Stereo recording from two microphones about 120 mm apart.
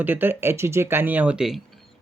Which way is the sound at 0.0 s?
15° right (ahead or behind).